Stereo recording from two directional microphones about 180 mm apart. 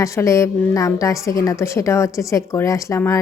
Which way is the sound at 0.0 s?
15° left (ahead or behind).